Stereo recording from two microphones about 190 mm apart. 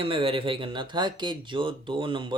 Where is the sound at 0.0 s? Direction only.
30° right (ahead or behind).